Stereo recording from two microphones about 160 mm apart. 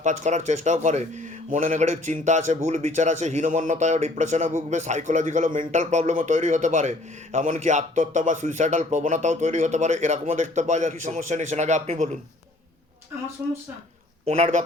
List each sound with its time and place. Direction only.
0.0 s a man's voice: 50° right (ahead or behind)
14.3 s a man's voice: 45° right (ahead or behind)